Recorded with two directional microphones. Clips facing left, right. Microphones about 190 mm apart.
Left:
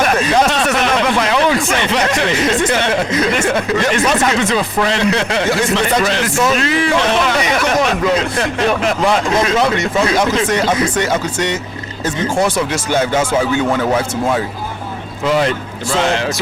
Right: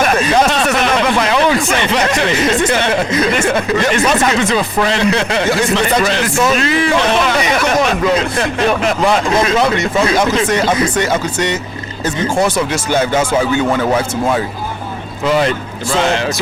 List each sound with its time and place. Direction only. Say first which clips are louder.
0.0 s speech: right 1 dB; 10° right (ahead or behind)
12.9 s speech: right 1 dB; 10° right (ahead or behind)
16.0 s speech: right 1 dB; 10° right (ahead or behind)